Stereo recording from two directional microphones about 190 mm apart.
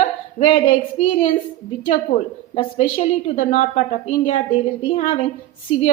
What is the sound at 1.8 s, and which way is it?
A woman's voice, 35° left (ahead or behind).